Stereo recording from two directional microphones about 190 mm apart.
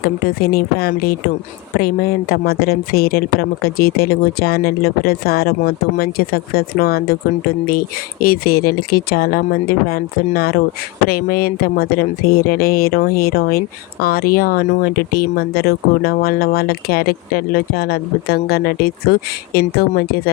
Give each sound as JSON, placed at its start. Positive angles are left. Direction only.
{"t": 0.0, "sound": "speech", "side_deg": 55}